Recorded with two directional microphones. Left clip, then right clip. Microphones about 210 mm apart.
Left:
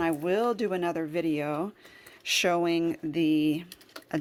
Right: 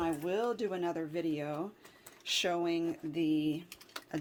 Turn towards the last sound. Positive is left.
turn(degrees=40)  # may be behind; listen again after turning